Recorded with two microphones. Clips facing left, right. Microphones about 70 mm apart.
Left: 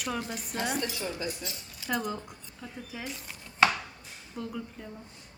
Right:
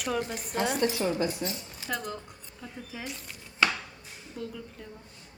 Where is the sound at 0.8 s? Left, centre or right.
Right.